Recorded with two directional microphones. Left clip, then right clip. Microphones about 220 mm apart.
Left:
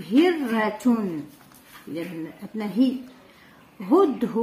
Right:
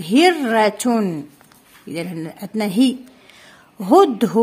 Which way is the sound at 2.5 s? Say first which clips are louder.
Right 6 dB; 50° right (ahead or behind).